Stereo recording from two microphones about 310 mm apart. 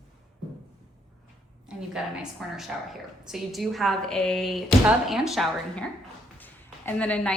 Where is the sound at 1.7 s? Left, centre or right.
Centre.